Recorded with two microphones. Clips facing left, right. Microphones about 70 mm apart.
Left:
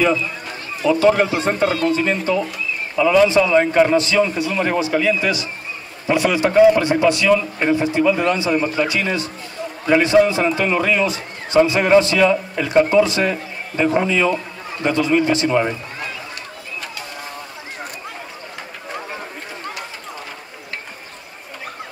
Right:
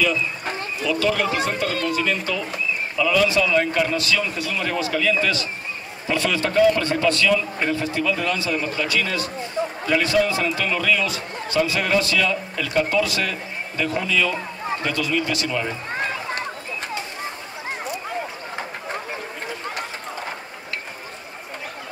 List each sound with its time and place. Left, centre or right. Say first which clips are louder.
0.8 s a man's voice: left 7 dB; left